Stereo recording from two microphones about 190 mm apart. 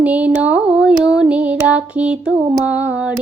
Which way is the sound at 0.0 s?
10° right (ahead or behind).